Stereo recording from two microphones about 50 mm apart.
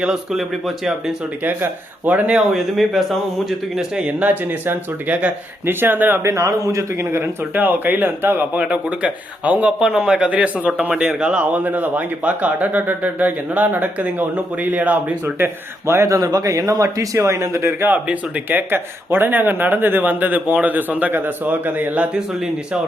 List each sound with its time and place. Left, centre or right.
2.0 s speech: right
2.5 s speech: centre
4.0 s speech: right
4.6 s speech: right
6.2 s a man's voice: right
7.5 s speech: right
8.5 s speech: right
9.8 s a man's voice: centre
10.2 s speech: right
11.4 s speech: right
15.9 s speech: right
16.8 s a man's voice: right
17.6 s speech: right
17.8 s speech: right